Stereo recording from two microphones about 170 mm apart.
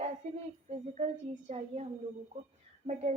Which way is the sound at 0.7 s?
40° right (ahead or behind).